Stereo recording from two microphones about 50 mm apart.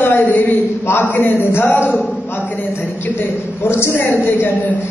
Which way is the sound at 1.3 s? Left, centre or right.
Left.